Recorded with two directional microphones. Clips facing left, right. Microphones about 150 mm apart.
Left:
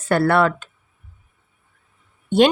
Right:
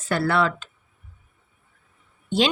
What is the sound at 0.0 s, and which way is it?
Speech, 55° left (ahead or behind).